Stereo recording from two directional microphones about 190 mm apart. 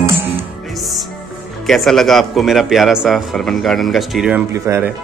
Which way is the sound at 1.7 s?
Centre (ahead or behind).